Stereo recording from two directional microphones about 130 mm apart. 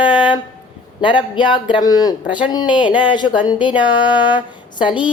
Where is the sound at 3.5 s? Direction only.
40° left (ahead or behind).